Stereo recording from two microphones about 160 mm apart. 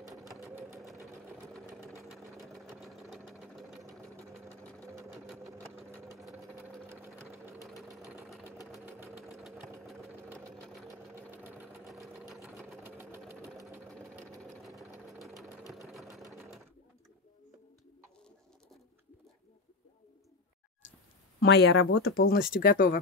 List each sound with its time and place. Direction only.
2.0 s engine: centre (ahead or behind)
4.2 s sewing machine: 15° right (ahead or behind)
5.1 s sewing machine: centre (ahead or behind)
5.9 s sewing machine: 15° right (ahead or behind)
7.6 s engine: centre (ahead or behind)
8.8 s sewing machine: 10° right (ahead or behind)
9.4 s engine: centre (ahead or behind)
10.9 s sewing machine: 15° right (ahead or behind)
11.8 s sewing machine: centre (ahead or behind)
15.1 s sewing machine: centre (ahead or behind)
21.4 s speech: 90° left; by 22.9 s 65° left (ahead or behind)